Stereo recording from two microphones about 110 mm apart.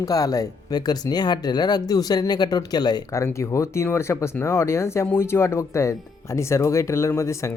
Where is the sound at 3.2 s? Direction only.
25° left (ahead or behind).